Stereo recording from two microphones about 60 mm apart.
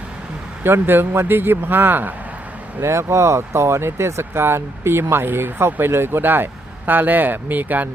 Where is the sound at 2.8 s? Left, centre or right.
Right.